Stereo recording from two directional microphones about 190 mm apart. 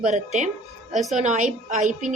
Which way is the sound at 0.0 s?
40° right (ahead or behind).